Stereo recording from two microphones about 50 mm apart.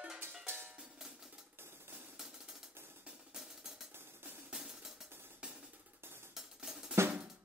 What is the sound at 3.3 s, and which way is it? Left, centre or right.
Music, centre.